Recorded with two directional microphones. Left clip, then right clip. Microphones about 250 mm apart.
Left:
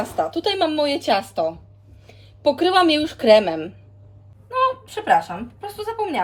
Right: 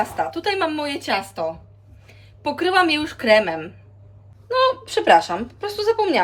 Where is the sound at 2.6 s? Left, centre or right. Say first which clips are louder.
Even; centre.